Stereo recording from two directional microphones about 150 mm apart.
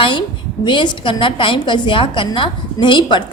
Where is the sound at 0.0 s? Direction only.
30° left (ahead or behind).